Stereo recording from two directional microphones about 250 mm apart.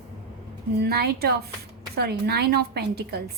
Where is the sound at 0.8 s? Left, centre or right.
Right.